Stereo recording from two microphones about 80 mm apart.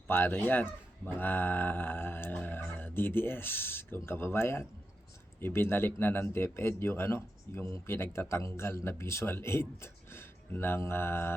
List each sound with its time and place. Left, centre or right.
0.1 s speech: left
2.3 s a sound: centre
2.6 s a man's voice: left